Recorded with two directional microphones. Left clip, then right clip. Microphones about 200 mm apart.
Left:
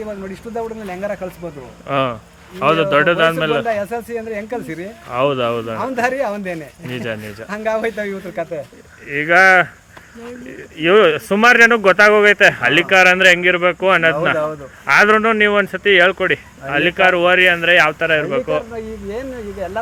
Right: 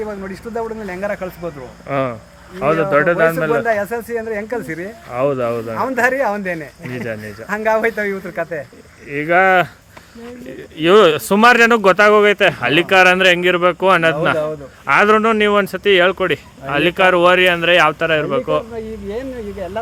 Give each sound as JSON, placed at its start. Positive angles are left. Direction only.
{"t": 0.5, "sound": "speech", "side_deg": -5}
{"t": 3.7, "sound": "speech", "side_deg": -10}
{"t": 5.1, "sound": "speech", "side_deg": 15}
{"t": 5.7, "sound": "speech", "side_deg": -10}
{"t": 6.9, "sound": "speech", "side_deg": 15}
{"t": 7.4, "sound": "speech", "side_deg": -10}
{"t": 10.8, "sound": "speech", "side_deg": -15}